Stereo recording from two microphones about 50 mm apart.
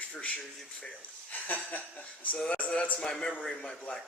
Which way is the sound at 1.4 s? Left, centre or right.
Left.